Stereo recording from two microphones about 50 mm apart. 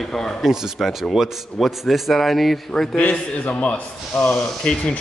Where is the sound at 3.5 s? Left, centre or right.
Left.